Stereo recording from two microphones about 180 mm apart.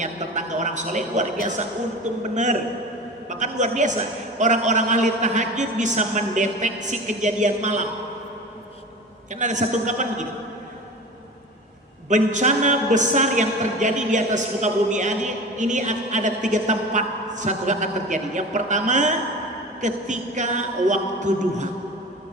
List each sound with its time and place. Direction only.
0.0 s a man's voice: 40° right (ahead or behind)
9.3 s a man's voice: 40° right (ahead or behind)
12.0 s a man's voice: 40° right (ahead or behind)